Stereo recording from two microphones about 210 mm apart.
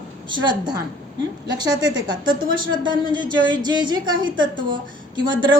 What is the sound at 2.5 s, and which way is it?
A woman's voice, 20° right (ahead or behind).